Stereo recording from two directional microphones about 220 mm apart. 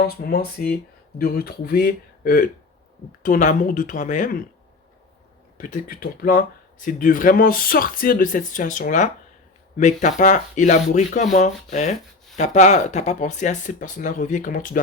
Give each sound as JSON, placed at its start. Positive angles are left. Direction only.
{"t": 0.2, "sound": "speech", "side_deg": 45}
{"t": 5.5, "sound": "speech", "side_deg": 35}